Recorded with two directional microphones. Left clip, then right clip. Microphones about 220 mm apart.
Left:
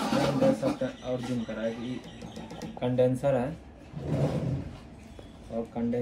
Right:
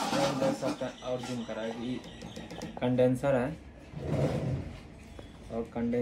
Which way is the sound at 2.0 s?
Centre (ahead or behind).